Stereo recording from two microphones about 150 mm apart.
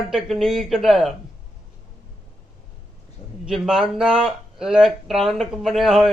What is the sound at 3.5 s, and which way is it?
Speech, 5° right (ahead or behind).